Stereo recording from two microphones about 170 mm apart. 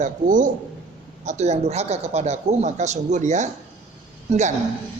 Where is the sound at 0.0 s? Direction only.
50° right (ahead or behind).